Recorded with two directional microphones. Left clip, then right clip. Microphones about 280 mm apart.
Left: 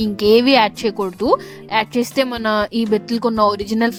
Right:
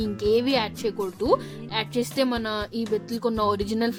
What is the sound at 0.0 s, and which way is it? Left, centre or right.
Speech, left.